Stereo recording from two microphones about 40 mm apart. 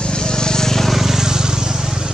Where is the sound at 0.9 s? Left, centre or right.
Centre.